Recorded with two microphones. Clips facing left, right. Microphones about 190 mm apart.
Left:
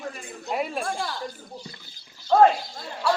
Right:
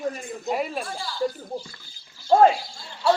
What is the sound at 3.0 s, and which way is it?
Speech, 25° right (ahead or behind).